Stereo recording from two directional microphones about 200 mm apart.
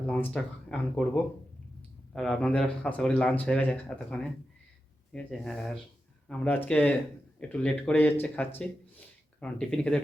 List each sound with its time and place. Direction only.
0.1 s speech: 5° left (ahead or behind)